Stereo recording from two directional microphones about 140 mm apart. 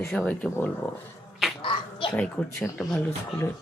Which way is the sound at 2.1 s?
15° left (ahead or behind).